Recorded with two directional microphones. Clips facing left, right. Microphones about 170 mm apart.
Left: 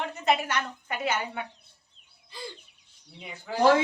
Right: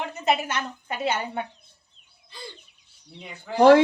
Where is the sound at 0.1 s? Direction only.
20° right (ahead or behind).